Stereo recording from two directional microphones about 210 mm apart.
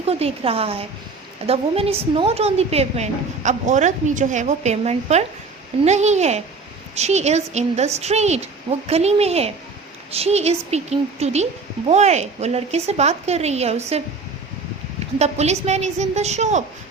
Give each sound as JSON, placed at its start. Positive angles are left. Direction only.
{"t": 0.1, "sound": "a woman's voice", "side_deg": -30}
{"t": 15.2, "sound": "a woman's voice", "side_deg": -30}